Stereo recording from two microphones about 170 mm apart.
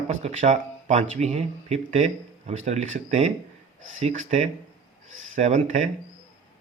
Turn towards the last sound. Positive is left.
turn(degrees=-45)  # may be behind; listen again after turning